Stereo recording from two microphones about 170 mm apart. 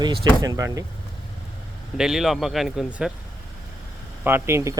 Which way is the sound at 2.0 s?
Centre (ahead or behind).